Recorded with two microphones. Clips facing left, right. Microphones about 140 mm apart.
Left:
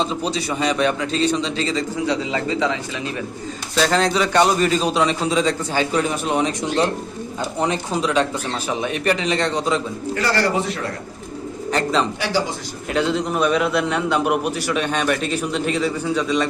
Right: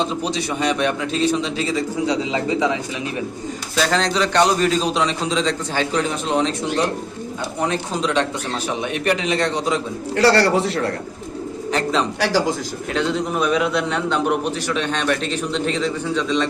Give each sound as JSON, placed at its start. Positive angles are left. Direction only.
{"t": 0.0, "sound": "a man's voice", "side_deg": 0}
{"t": 3.8, "sound": "a man's voice", "side_deg": 0}
{"t": 8.0, "sound": "a man's voice", "side_deg": 5}
{"t": 10.2, "sound": "a man's voice", "side_deg": -80}
{"t": 11.7, "sound": "a man's voice", "side_deg": 0}